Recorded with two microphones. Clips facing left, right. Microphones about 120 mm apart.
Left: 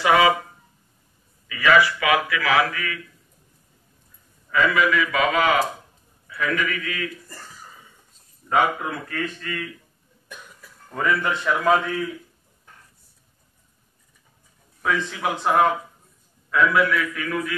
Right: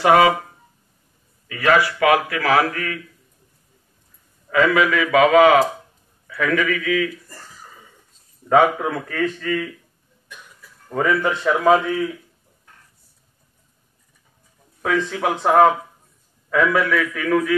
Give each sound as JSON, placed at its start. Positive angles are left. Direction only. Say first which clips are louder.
{"t": 0.0, "sound": "a man's voice", "louder": "right 3 dB", "side_deg": -50}
{"t": 1.5, "sound": "a man's voice", "louder": "right 1 dB", "side_deg": -50}
{"t": 4.5, "sound": "a man's voice", "louder": "right 3 dB", "side_deg": -60}
{"t": 6.2, "sound": "a man's voice", "louder": "right 5 dB", "side_deg": -75}
{"t": 8.5, "sound": "a man's voice", "louder": "right 6 dB", "side_deg": -80}
{"t": 10.9, "sound": "speech", "louder": "right 4 dB", "side_deg": -35}
{"t": 14.8, "sound": "a man's voice", "louder": "right 4 dB", "side_deg": -55}
{"t": 16.4, "sound": "a man's voice", "louder": "right 1 dB", "side_deg": -85}